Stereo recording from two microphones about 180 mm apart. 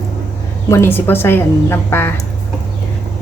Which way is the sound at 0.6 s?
15° left (ahead or behind).